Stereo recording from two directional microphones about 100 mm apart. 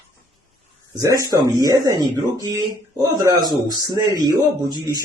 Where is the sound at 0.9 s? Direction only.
35° right (ahead or behind).